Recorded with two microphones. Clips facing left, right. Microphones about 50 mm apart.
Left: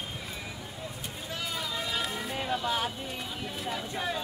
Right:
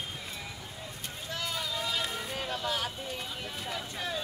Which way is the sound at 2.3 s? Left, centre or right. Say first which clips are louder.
Left 5 dB; centre.